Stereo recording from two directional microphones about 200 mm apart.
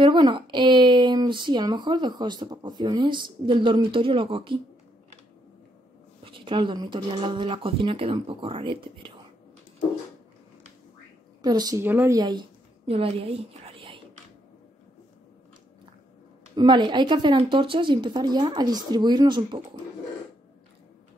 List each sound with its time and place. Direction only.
0.0 s speech: 25° right (ahead or behind)
6.2 s speech: 25° right (ahead or behind)
11.4 s a woman's voice: 20° right (ahead or behind)
16.5 s speech: 20° right (ahead or behind)